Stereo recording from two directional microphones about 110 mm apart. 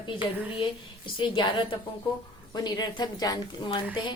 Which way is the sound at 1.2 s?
45° left (ahead or behind).